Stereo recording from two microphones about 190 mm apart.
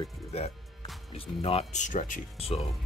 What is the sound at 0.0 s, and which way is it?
Speech, 35° left (ahead or behind).